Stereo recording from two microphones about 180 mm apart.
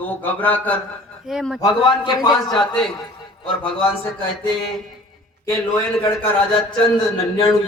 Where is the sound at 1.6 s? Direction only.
25° left (ahead or behind).